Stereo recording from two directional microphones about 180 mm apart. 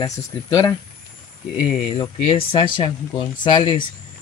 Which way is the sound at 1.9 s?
30° left (ahead or behind).